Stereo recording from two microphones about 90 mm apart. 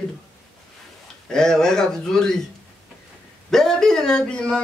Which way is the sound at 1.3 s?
5° left (ahead or behind).